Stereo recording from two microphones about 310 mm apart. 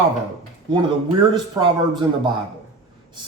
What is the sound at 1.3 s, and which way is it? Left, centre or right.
Speech, centre.